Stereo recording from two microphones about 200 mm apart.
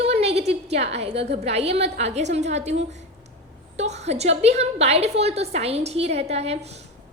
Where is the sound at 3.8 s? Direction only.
35° right (ahead or behind).